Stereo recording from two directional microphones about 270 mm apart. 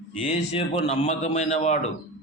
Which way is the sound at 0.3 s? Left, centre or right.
Left.